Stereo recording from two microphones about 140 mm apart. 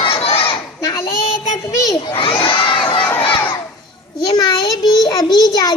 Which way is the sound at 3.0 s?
10° left (ahead or behind).